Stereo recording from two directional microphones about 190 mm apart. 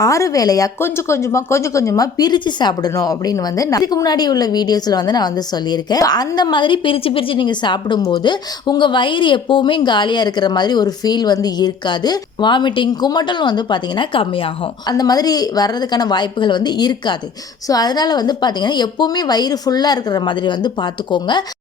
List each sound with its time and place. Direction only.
0.0 s speech: 15° left (ahead or behind)